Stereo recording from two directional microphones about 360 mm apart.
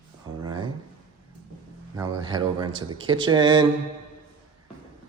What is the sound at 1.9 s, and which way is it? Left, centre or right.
Speech, centre.